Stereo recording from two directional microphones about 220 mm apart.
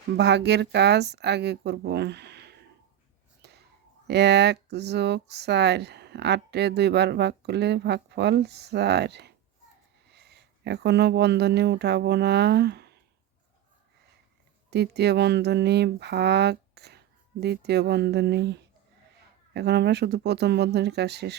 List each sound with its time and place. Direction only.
0.2 s speech: 50° right (ahead or behind)
3.4 s whispering: 50° right (ahead or behind)
4.0 s speech: 50° right (ahead or behind)
14.7 s speech: 50° right (ahead or behind)
19.5 s speech: 50° right (ahead or behind)